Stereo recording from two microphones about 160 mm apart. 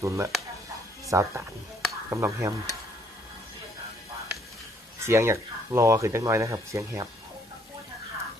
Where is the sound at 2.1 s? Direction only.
20° right (ahead or behind).